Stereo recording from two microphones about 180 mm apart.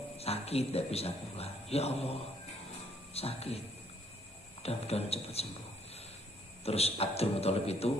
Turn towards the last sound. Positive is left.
turn(degrees=35)  # may be behind; listen again after turning